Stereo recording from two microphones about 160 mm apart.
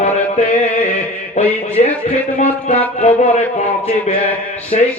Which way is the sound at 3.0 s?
45° left (ahead or behind).